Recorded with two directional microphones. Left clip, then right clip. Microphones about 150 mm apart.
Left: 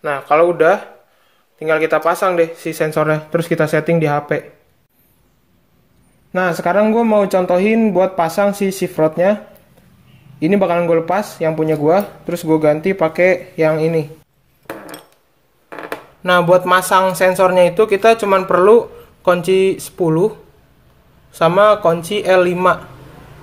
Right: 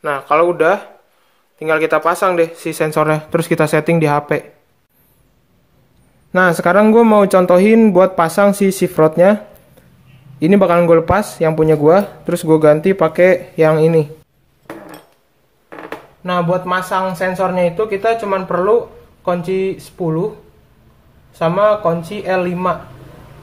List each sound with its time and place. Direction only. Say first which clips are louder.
0.0 s speech: even; 15° right (ahead or behind)
6.3 s speech: right 4 dB; 20° right (ahead or behind)
10.4 s speech: right 3 dB; 25° right (ahead or behind)
15.7 s speech: left 2 dB; 55° left (ahead or behind)
21.3 s speech: left 2 dB; 50° left (ahead or behind)